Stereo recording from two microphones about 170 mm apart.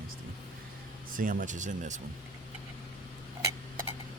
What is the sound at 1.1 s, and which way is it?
Speech, 50° right (ahead or behind).